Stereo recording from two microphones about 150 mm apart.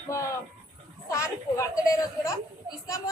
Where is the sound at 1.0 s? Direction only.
20° left (ahead or behind).